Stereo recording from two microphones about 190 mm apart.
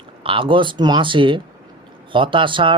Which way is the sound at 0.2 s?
25° right (ahead or behind).